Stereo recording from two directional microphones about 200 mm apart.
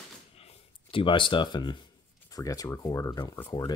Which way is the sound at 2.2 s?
15° left (ahead or behind).